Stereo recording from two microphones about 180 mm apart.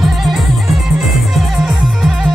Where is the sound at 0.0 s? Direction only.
Centre (ahead or behind).